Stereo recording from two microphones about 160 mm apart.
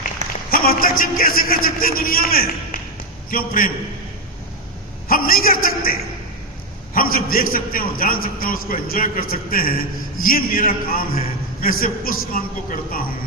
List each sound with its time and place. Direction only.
0.2 s a sound: 50° right (ahead or behind)
0.5 s a man's voice: 65° left (ahead or behind)
5.0 s a man's voice: 65° left (ahead or behind)